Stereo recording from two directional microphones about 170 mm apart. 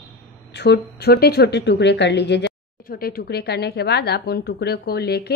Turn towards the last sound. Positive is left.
turn(degrees=70)  # may be behind; listen again after turning